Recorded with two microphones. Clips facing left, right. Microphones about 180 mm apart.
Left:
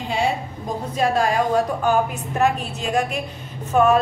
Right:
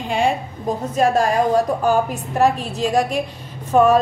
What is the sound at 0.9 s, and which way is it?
A woman's voice, 45° right (ahead or behind).